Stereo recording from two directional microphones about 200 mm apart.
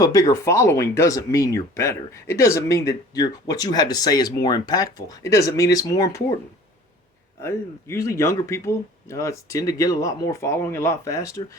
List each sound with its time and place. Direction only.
0.0 s speech: 15° left (ahead or behind)
7.4 s speech: 15° left (ahead or behind)